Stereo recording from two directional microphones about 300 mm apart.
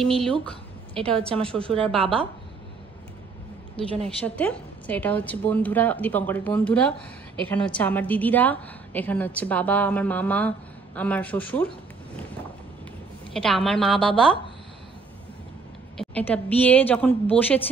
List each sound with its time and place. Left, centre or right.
0.0 s a woman's voice: centre
2.0 s a woman's voice: centre
4.4 s a woman's voice: centre
13.3 s a woman's voice: centre
16.0 s a woman's voice: centre